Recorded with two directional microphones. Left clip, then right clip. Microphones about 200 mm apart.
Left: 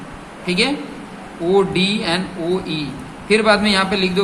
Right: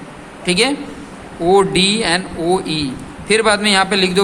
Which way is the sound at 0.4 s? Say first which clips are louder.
Right 3 dB; 55° right (ahead or behind).